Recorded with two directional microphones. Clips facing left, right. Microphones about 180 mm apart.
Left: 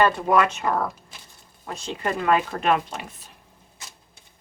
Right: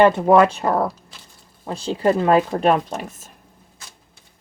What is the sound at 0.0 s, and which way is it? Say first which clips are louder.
Speech: right 6 dB; 30° right (ahead or behind).